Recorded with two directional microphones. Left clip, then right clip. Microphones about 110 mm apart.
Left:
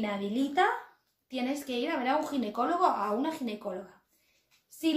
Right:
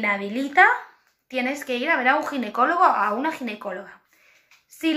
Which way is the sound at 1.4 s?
35° left (ahead or behind).